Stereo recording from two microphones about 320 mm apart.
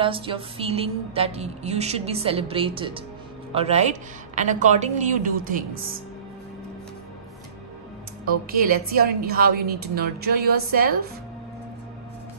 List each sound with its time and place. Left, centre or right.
0.0 s a woman's voice: centre
8.5 s a woman's voice: right